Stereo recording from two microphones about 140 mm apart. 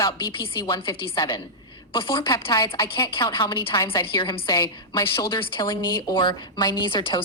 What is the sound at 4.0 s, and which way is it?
A woman's voice, 35° left (ahead or behind).